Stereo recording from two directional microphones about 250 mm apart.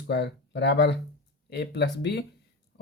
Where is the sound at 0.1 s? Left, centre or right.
Left.